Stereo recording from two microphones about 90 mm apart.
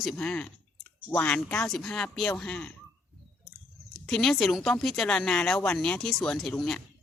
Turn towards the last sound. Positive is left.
turn(degrees=5)  # may be behind; listen again after turning